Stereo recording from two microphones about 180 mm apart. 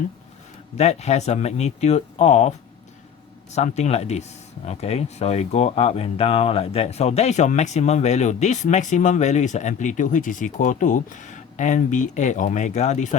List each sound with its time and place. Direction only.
0.8 s speech: 40° left (ahead or behind)
3.5 s speech: 40° left (ahead or behind)